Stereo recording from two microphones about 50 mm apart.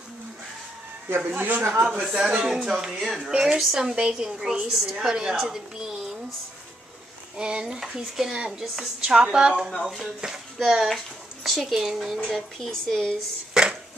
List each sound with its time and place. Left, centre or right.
1.2 s speech: right
1.9 s a woman's voice: centre
3.9 s a woman's voice: centre
7.3 s a woman's voice: centre
12.3 s a woman's voice: centre
13.5 s a sound: centre